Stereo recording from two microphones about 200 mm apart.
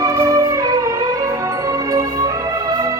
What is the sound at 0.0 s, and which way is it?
Music, 15° right (ahead or behind).